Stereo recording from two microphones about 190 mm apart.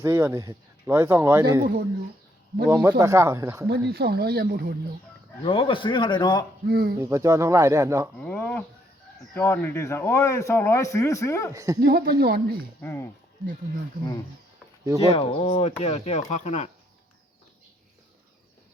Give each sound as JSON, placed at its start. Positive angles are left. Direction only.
{"t": 0.0, "sound": "speech", "side_deg": -15}
{"t": 2.6, "sound": "speech", "side_deg": -15}
{"t": 3.7, "sound": "speech", "side_deg": -60}
{"t": 5.4, "sound": "a man's voice", "side_deg": 25}
{"t": 6.7, "sound": "speech", "side_deg": -50}
{"t": 7.0, "sound": "speech", "side_deg": -15}
{"t": 8.2, "sound": "speech", "side_deg": 10}
{"t": 11.5, "sound": "speech", "side_deg": -15}
{"t": 11.8, "sound": "speech", "side_deg": -55}
{"t": 12.8, "sound": "speech", "side_deg": 10}
{"t": 15.0, "sound": "speech", "side_deg": 30}